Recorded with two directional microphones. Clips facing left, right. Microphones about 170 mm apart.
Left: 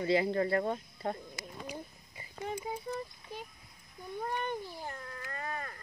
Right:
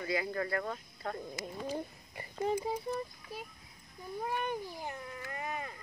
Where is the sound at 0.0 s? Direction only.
25° left (ahead or behind).